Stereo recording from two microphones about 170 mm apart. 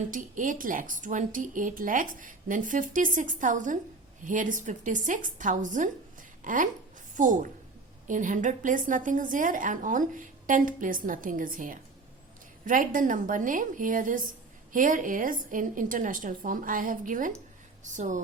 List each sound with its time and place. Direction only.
0.1 s a woman's voice: 50° right (ahead or behind)